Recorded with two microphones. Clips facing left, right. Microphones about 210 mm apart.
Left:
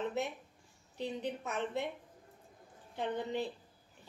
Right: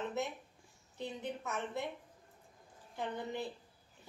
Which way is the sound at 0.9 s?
15° left (ahead or behind).